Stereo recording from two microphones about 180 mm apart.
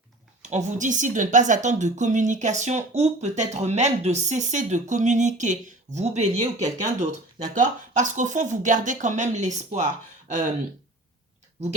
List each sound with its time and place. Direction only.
0.5 s speech: 40° right (ahead or behind)